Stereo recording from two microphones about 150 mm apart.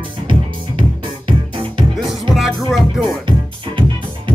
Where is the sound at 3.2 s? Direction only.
35° right (ahead or behind).